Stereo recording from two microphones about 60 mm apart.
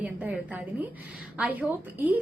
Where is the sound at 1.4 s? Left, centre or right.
Right.